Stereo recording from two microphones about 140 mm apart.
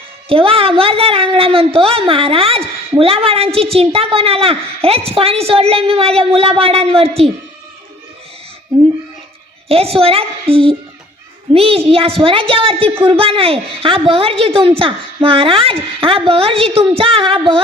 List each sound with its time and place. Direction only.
0.3 s a woman's voice: 40° right (ahead or behind)
9.6 s a woman's voice: 45° right (ahead or behind)